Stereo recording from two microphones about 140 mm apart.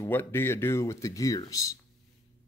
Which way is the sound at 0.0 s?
15° left (ahead or behind).